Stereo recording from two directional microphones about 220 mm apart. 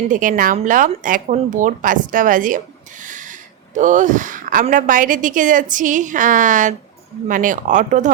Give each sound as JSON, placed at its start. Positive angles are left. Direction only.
{"t": 0.1, "sound": "a woman's voice", "side_deg": -35}
{"t": 3.0, "sound": "a sound", "side_deg": -35}
{"t": 3.8, "sound": "a woman's voice", "side_deg": -35}